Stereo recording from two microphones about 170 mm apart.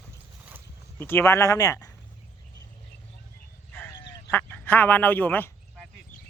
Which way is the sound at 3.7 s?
15° left (ahead or behind).